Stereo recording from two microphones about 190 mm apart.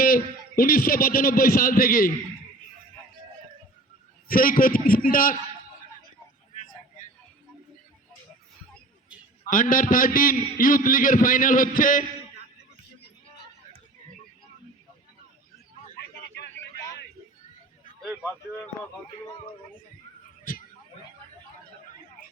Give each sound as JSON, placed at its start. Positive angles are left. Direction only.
{"t": 0.0, "sound": "a man's voice", "side_deg": 50}
{"t": 4.3, "sound": "a man's voice", "side_deg": 50}
{"t": 9.5, "sound": "a man's voice", "side_deg": 45}
{"t": 18.0, "sound": "a sound", "side_deg": 5}